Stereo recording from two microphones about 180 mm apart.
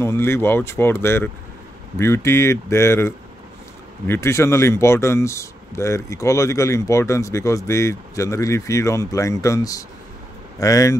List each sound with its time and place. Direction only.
0.0 s speech: 15° left (ahead or behind)